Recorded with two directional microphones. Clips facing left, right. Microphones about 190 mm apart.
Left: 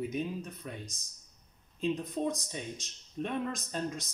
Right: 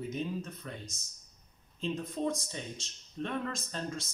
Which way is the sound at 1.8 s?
15° left (ahead or behind).